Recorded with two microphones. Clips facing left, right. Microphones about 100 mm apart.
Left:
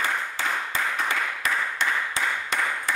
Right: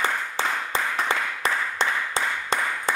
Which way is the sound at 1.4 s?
30° right (ahead or behind).